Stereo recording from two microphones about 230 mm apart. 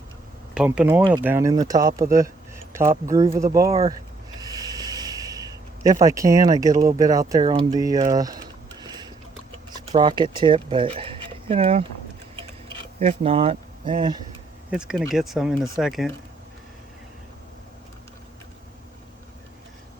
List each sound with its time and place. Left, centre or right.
0.5 s speech: centre
3.1 s speech: centre
4.4 s snort: centre
8.1 s speech: centre
8.8 s a sound: centre
10.0 s speech: centre
13.0 s speech: right
14.7 s speech: centre